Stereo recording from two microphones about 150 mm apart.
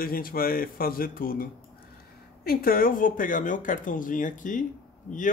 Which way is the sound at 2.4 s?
85° left.